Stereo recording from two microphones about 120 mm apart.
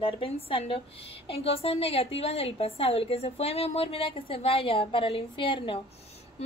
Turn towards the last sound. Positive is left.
turn(degrees=45)  # may be behind; listen again after turning